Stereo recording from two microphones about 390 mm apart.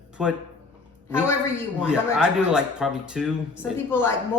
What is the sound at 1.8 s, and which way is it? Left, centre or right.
A woman's voice, centre.